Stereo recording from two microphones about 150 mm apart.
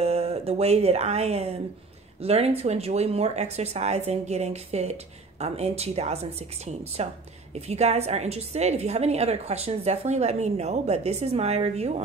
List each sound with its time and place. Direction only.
0.0 s a woman's voice: 45° right (ahead or behind)